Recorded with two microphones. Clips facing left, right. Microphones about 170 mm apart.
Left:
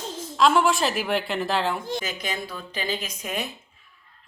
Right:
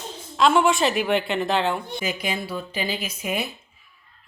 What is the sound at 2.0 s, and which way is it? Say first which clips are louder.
Speech: right 4 dB; 10° right (ahead or behind).